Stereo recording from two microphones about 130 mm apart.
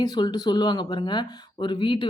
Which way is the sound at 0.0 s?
30° left (ahead or behind).